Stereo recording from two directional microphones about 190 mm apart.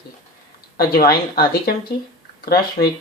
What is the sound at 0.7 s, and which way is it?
Speech, 55° left (ahead or behind).